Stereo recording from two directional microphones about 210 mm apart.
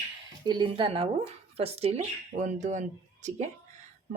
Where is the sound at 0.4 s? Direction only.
20° right (ahead or behind).